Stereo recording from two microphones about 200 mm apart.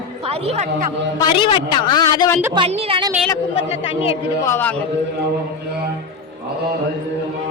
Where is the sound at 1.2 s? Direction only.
25° left (ahead or behind).